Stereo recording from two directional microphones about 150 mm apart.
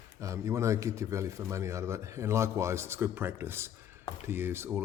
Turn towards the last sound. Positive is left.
turn(degrees=-15)  # may be behind; listen again after turning